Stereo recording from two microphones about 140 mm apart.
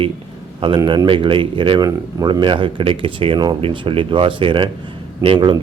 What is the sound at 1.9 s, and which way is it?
Speech, 25° right (ahead or behind).